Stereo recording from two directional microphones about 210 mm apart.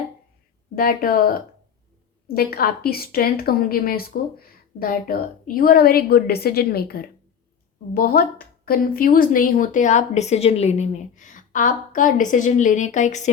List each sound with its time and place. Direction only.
0.8 s a woman's voice: 45° left (ahead or behind)